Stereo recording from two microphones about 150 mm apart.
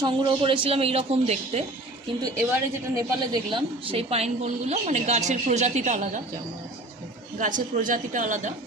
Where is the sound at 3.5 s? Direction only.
40° right (ahead or behind); by 6.2 s 55° right (ahead or behind).